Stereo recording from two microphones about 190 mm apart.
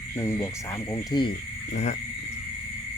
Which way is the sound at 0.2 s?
15° left (ahead or behind).